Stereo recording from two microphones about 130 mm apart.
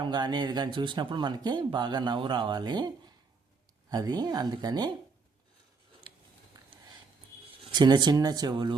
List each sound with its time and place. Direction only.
0.0 s speech: 35° right (ahead or behind)
6.0 s a sound: 40° right (ahead or behind)
7.6 s speech: 35° right (ahead or behind)